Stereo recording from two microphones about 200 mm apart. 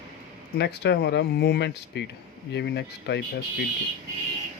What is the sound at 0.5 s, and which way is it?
Speech, 55° left (ahead or behind).